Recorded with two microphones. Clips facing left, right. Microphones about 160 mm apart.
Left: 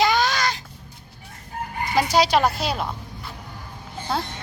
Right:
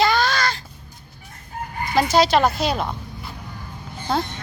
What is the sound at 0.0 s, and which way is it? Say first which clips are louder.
Crow: right 1 dB; 15° left (ahead or behind).